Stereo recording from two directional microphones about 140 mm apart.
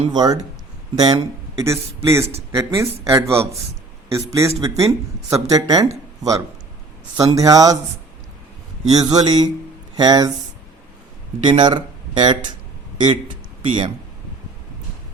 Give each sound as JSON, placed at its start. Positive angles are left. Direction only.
{"t": 0.1, "sound": "speech", "side_deg": -30}
{"t": 7.2, "sound": "speech", "side_deg": -25}
{"t": 9.0, "sound": "speech", "side_deg": -30}
{"t": 11.4, "sound": "speech", "side_deg": -35}